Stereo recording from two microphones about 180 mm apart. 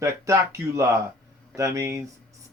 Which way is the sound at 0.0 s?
15° right (ahead or behind).